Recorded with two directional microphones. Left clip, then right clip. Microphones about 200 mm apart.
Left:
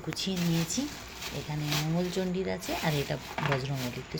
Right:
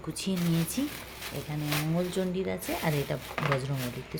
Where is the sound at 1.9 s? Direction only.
15° right (ahead or behind).